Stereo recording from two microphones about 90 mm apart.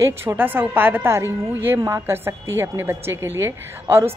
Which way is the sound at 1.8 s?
40° right (ahead or behind).